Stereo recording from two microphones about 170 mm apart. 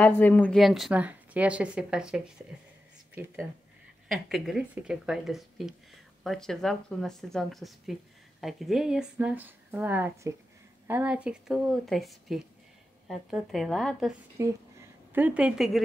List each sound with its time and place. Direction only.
0.0 s a woman's voice: 10° left (ahead or behind)
4.1 s a woman's voice: centre (ahead or behind)
14.4 s a woman's voice: 20° right (ahead or behind); by 15.8 s centre (ahead or behind)